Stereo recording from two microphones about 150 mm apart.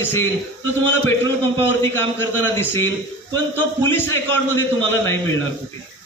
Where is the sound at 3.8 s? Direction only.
15° left (ahead or behind).